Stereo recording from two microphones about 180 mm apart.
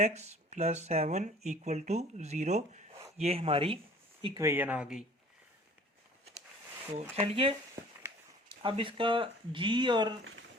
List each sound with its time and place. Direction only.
0.0 s speech: 40° right (ahead or behind)
4.4 s speech: 15° right (ahead or behind)
6.9 s speech: 35° right (ahead or behind)
8.6 s speech: 30° right (ahead or behind)